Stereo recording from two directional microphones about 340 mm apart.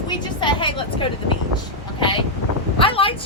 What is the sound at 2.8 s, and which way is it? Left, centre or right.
Speech, centre.